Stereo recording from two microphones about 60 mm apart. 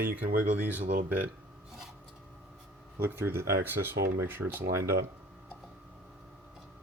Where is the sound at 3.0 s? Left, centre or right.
Right.